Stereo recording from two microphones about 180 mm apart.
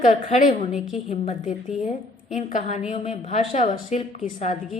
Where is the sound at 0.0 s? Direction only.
40° left (ahead or behind).